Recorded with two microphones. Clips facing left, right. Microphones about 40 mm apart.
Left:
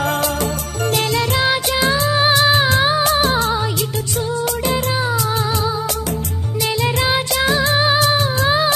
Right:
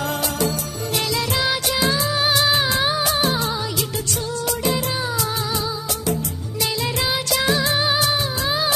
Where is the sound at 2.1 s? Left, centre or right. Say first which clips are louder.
Left 5 dB; left.